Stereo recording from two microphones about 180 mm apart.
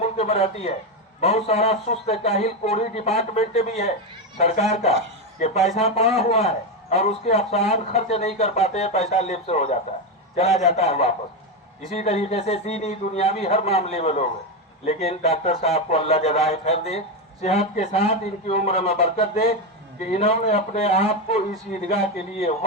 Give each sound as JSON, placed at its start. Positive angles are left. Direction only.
{"t": 0.0, "sound": "a man's voice", "side_deg": 35}